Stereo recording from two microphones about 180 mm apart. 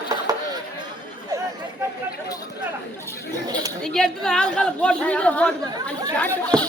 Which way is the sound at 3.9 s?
Centre (ahead or behind).